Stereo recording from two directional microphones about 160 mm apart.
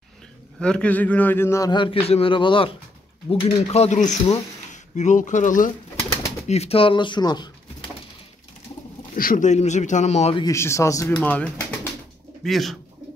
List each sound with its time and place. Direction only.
0.6 s a man's voice: 5° left (ahead or behind); by 5.7 s 55° left (ahead or behind)
6.4 s speech: 40° left (ahead or behind)
9.1 s speech: 60° left (ahead or behind); by 10.3 s 45° left (ahead or behind)
10.3 s a man's voice: 20° left (ahead or behind)
11.1 s speech: 10° left (ahead or behind)